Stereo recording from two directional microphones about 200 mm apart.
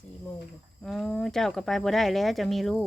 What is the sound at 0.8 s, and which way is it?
Speech, centre (ahead or behind).